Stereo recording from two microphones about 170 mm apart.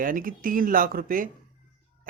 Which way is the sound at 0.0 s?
55° right (ahead or behind).